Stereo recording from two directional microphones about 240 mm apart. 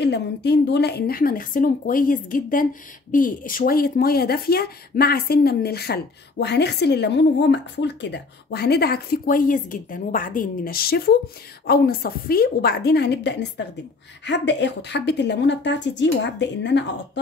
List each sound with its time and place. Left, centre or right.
0.0 s a woman's voice: left